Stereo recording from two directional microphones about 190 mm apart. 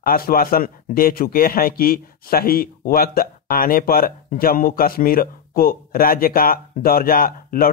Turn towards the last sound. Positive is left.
turn(degrees=50)  # may be behind; listen again after turning